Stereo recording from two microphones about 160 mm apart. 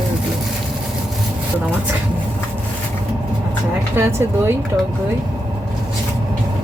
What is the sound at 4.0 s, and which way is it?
Speech, 15° right (ahead or behind).